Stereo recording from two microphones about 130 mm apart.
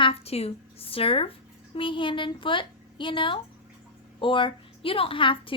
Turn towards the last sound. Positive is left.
turn(degrees=40)  # may be behind; listen again after turning